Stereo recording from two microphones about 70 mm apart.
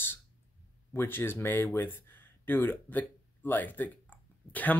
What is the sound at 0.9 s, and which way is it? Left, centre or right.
Speech, left.